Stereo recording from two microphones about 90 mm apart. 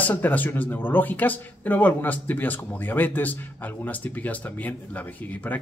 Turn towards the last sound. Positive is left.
turn(degrees=20)  # may be behind; listen again after turning